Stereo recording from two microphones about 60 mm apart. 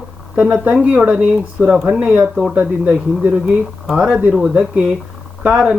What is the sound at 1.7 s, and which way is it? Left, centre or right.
Speech, centre.